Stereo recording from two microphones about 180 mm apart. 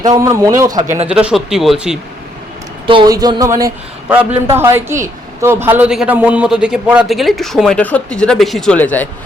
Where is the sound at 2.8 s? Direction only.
25° right (ahead or behind).